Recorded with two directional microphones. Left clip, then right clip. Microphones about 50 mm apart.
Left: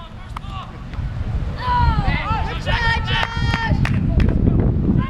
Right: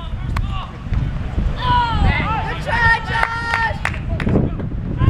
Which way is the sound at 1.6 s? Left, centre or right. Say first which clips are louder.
Right 3 dB; right.